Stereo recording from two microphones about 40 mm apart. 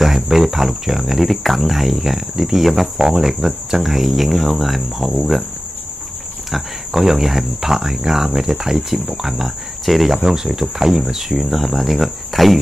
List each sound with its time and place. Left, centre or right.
0.0 s speech: centre
6.5 s speech: centre